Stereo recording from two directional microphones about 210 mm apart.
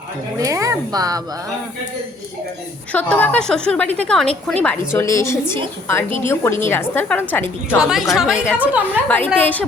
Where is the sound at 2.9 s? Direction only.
5° left (ahead or behind).